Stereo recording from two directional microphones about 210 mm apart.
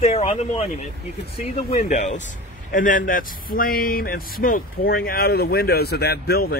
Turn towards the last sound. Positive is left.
turn(degrees=50)  # may be behind; listen again after turning